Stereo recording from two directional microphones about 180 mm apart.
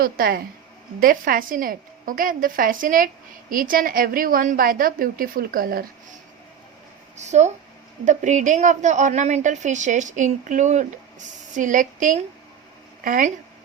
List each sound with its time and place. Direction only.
0.0 s a woman's voice: 55° right (ahead or behind)
7.2 s a woman's voice: 40° right (ahead or behind)